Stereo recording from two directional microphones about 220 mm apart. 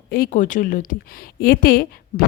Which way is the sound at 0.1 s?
40° left (ahead or behind).